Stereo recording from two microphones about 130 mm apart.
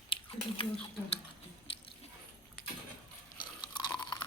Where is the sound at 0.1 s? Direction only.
45° left (ahead or behind).